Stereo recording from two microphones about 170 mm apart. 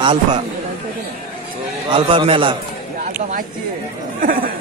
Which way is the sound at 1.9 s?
30° right (ahead or behind).